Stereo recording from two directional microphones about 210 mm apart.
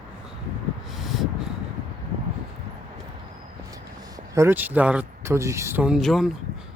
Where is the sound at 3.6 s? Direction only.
15° right (ahead or behind).